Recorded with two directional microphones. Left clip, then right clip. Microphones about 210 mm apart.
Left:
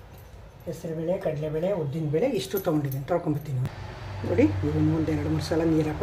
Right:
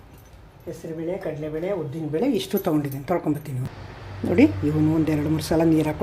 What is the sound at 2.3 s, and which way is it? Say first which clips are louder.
Speech: right 3 dB; 35° right (ahead or behind).